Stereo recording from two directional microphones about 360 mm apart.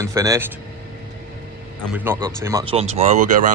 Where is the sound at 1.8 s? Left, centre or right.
Centre; by 3.5 s right.